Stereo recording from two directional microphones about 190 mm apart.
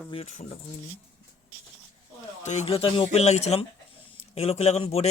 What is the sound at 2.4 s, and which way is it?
Speech, 40° left (ahead or behind).